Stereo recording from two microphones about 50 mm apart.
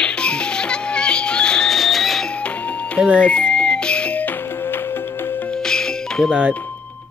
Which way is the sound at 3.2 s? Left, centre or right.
Left.